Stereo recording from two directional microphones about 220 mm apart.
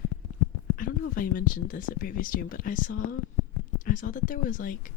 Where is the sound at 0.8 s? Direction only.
40° left (ahead or behind).